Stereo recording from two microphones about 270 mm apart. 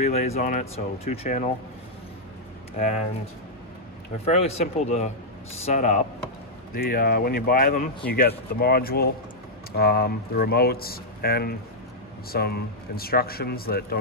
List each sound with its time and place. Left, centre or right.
0.0 s speech: left
4.2 s speech: left